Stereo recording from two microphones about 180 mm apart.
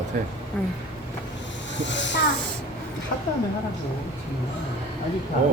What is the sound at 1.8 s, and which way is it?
Speech, 85° left.